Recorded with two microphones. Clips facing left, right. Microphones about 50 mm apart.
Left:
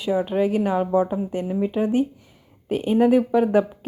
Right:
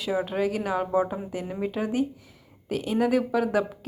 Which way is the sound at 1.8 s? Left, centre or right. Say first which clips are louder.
Left 5 dB; left.